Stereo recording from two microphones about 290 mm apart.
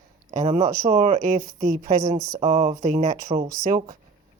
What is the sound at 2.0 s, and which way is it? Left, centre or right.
Speech, centre.